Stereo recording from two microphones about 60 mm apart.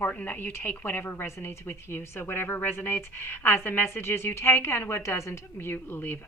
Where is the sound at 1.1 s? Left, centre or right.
Left.